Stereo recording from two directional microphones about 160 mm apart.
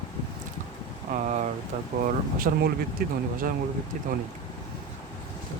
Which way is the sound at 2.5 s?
60° right (ahead or behind).